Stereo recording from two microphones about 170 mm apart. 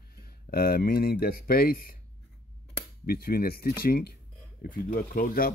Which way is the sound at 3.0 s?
60° left (ahead or behind).